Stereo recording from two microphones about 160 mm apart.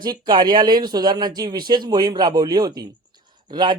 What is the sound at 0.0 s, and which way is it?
A man's voice, 25° right (ahead or behind).